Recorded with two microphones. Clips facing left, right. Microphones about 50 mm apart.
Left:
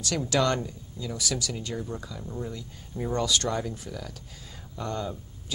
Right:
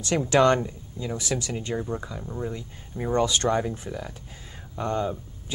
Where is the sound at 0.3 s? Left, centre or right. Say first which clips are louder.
Right 6 dB; right.